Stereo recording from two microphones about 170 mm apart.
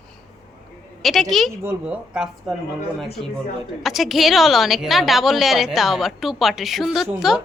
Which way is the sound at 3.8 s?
Centre (ahead or behind).